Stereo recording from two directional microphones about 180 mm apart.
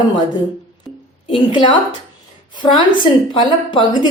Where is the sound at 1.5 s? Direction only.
25° left (ahead or behind).